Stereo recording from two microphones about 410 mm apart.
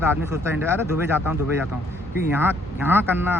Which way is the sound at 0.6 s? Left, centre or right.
Centre.